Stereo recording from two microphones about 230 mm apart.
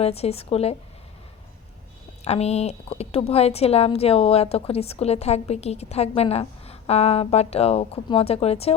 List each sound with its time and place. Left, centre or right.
0.0 s a woman's voice: left
2.2 s a woman's voice: left